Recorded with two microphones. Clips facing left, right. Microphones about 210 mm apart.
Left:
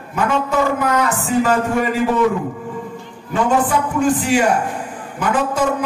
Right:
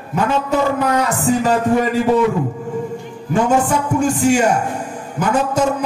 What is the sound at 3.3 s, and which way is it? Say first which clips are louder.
A man's voice: right 1 dB; 45° right (ahead or behind).